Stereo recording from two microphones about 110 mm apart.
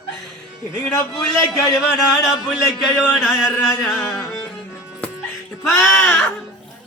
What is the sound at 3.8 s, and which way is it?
Speech, 5° left (ahead or behind).